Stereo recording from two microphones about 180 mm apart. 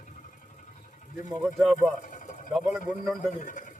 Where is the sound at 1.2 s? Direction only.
5° right (ahead or behind).